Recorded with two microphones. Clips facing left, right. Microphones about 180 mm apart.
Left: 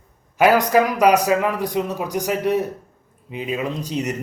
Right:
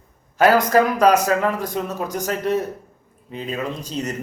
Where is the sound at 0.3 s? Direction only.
15° left (ahead or behind).